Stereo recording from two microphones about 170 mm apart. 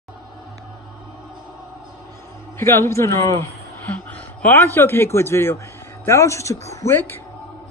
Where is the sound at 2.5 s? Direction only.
15° left (ahead or behind).